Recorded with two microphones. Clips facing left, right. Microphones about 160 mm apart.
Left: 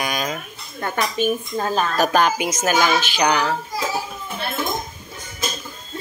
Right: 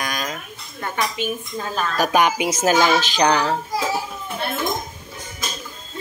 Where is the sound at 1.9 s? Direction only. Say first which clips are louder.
Right 2 dB; 15° right (ahead or behind).